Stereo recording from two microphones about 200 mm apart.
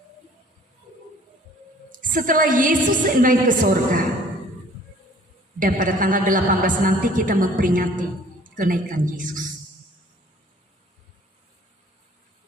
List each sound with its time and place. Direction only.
2.0 s a woman's voice: 40° right (ahead or behind)
5.5 s a woman's voice: 40° right (ahead or behind)